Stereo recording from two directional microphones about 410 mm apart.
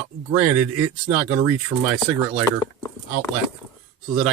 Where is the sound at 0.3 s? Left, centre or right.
Centre.